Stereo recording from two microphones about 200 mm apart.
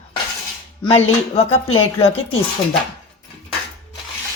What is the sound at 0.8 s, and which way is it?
Speech, 30° left (ahead or behind).